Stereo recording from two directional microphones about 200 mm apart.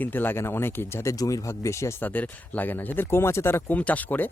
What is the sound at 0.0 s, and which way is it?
Speech, 10° left (ahead or behind).